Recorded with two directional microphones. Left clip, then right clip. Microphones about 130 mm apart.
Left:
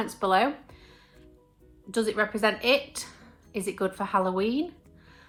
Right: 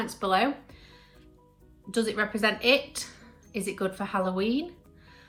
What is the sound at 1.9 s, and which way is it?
A woman's voice, 40° left (ahead or behind).